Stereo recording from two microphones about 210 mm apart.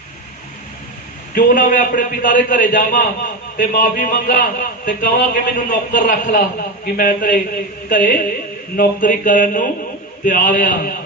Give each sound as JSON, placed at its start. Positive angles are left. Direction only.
{"t": 1.4, "sound": "a man's voice", "side_deg": 40}